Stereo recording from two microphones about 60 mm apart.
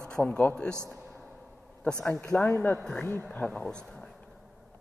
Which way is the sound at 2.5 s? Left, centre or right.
Left.